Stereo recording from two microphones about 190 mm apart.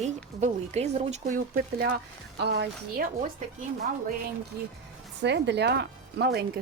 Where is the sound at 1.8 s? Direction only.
60° right (ahead or behind).